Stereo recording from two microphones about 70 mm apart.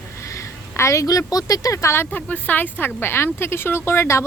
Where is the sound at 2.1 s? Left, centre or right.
Left.